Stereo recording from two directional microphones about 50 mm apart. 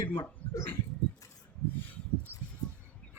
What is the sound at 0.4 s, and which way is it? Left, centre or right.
Dog, left.